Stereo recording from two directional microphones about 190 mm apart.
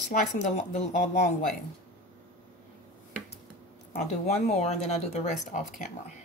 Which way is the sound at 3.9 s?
35° left (ahead or behind).